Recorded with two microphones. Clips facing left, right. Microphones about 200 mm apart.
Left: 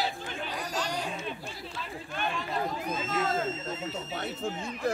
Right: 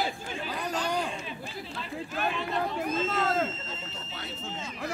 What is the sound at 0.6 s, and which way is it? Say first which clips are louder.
Chatter: right 4 dB; 55° right (ahead or behind).